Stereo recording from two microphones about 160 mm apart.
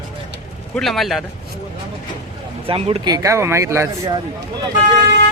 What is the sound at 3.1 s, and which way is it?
Speech, 20° right (ahead or behind).